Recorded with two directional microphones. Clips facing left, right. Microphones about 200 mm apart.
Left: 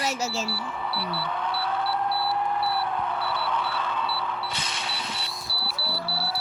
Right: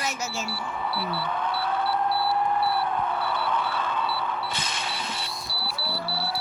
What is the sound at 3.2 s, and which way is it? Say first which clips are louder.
Single-lens reflex camera: right 1 dB; 50° right (ahead or behind).